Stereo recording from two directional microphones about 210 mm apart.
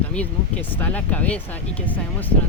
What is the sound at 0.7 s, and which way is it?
Speech, 10° left (ahead or behind).